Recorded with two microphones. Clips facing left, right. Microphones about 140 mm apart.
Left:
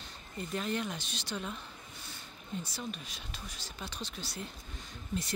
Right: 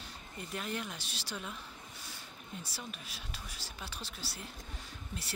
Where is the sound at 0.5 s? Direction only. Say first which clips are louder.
Left 5 dB; 5° right (ahead or behind).